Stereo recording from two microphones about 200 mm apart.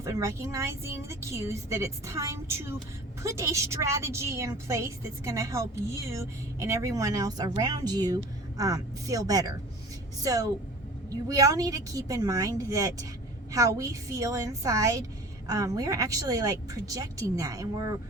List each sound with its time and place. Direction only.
0.0 s a woman's voice: 15° right (ahead or behind)
11.1 s a woman's voice: 15° right (ahead or behind)